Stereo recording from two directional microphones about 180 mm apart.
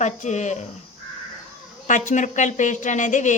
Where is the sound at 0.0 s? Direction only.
40° left (ahead or behind).